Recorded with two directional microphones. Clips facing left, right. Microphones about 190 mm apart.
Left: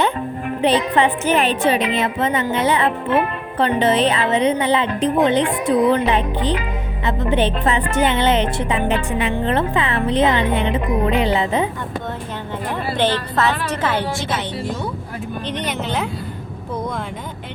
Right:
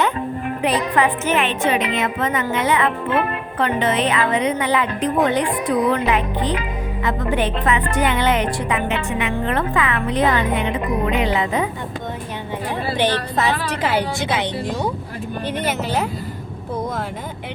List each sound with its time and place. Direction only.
0.6 s a woman's voice: 30° left (ahead or behind)
7.0 s music: 25° left (ahead or behind)
7.9 s speech: 25° left (ahead or behind)
12.7 s a woman's voice: 15° right (ahead or behind)